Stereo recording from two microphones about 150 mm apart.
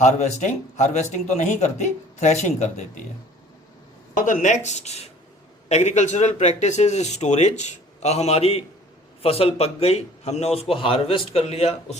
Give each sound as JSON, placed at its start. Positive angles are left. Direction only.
{"t": 0.0, "sound": "a man's voice", "side_deg": 50}
{"t": 4.1, "sound": "a man's voice", "side_deg": 60}